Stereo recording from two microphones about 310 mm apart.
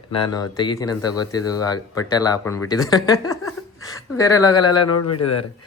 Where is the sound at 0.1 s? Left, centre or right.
Centre.